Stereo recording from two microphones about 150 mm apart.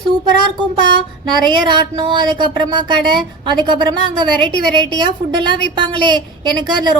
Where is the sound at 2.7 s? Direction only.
30° right (ahead or behind).